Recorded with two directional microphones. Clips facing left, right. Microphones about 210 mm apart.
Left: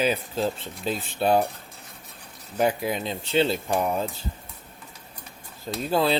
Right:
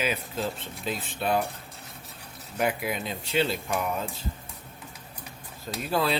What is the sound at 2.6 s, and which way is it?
Speech, 30° left (ahead or behind).